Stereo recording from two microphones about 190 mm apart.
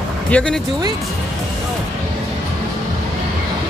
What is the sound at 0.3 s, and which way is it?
Speech, 5° left (ahead or behind).